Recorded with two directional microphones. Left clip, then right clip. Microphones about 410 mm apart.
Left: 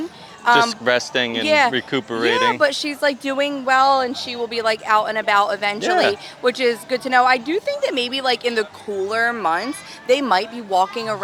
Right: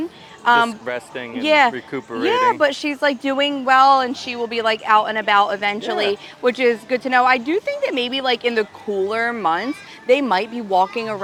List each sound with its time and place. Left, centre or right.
0.4 s speech: centre
0.7 s a man's voice: left
1.4 s speech: centre
1.7 s speech: left
2.3 s speech: centre